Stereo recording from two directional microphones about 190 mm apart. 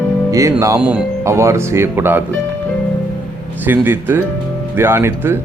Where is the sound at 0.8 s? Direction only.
5° right (ahead or behind).